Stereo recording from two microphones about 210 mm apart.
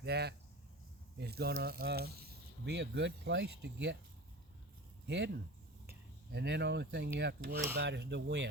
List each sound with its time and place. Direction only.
0.0 s speech: 50° right (ahead or behind)
5.0 s speech: 55° right (ahead or behind)